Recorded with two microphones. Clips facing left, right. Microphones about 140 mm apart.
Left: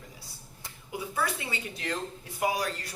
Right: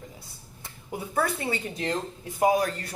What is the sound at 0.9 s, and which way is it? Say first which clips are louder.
Speech: right 4 dB; 50° right (ahead or behind).